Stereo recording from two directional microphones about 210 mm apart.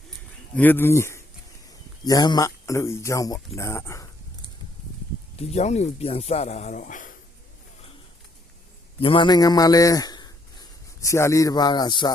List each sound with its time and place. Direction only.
0.5 s speech: 10° left (ahead or behind)
5.4 s speech: 30° left (ahead or behind)
9.0 s a man's voice: 25° left (ahead or behind)